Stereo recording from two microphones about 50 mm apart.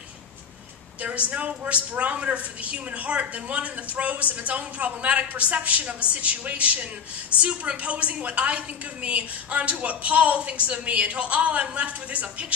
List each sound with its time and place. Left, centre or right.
1.0 s a woman's voice: right